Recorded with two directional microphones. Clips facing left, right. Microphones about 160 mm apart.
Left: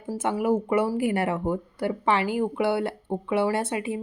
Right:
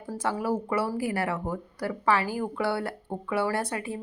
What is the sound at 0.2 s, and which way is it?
Speech, 20° left (ahead or behind).